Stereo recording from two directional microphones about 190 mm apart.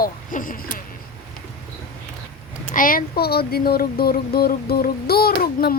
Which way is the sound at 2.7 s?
45° left (ahead or behind).